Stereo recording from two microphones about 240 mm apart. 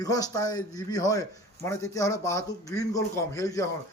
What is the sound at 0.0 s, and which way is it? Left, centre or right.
A man's voice, centre.